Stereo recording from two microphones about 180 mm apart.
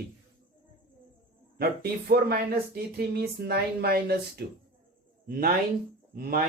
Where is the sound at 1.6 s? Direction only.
60° right (ahead or behind).